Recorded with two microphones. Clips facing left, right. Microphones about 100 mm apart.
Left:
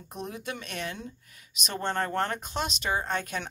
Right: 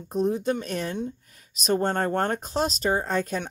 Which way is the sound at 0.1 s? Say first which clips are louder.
Right 12 dB; 30° right (ahead or behind).